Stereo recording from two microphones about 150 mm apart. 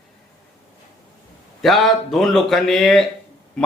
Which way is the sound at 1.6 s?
Centre (ahead or behind).